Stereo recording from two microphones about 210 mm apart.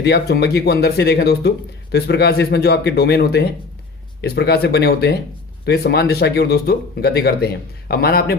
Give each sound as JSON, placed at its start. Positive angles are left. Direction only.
{"t": 0.0, "sound": "speech", "side_deg": 50}